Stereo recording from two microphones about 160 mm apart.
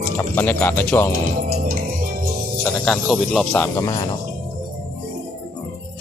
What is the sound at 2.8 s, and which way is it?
Speech, centre (ahead or behind).